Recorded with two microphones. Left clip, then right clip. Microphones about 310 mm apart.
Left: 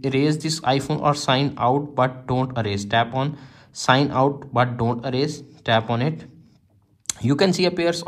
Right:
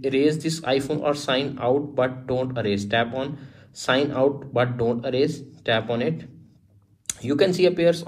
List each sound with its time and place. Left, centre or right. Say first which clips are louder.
0.0 s speech: right 1 dB; left
7.1 s speech: left 1 dB; left